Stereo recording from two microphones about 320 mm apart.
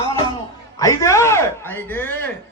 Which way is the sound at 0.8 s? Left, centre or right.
Centre.